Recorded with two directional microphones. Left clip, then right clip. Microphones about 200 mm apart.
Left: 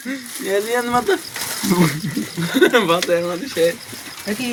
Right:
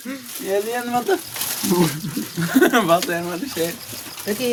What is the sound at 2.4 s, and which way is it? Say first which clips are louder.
Speech: left 2 dB; 40° right (ahead or behind).